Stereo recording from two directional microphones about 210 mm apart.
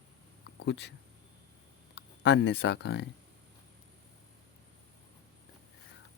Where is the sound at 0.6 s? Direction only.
55° left (ahead or behind).